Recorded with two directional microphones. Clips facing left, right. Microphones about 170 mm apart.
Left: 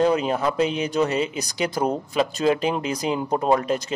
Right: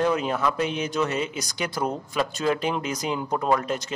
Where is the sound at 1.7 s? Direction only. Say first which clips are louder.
Left 4 dB; 35° left (ahead or behind).